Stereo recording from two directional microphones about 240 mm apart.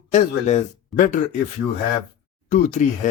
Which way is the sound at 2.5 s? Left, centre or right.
Left.